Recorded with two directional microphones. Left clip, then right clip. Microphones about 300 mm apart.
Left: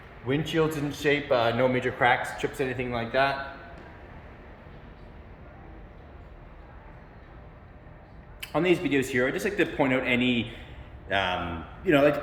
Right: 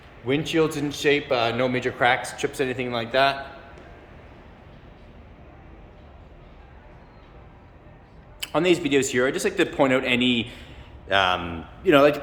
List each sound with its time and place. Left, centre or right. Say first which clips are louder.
0.3 s a man's voice: right 4 dB; centre
8.4 s a man's voice: right 4 dB; centre
11.9 s a man's voice: right 5 dB; centre